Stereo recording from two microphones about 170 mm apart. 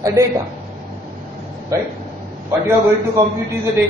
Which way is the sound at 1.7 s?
20° right (ahead or behind).